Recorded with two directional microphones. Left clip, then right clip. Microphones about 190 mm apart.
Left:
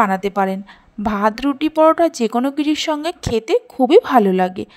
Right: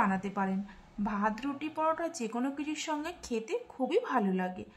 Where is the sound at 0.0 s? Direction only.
45° left (ahead or behind).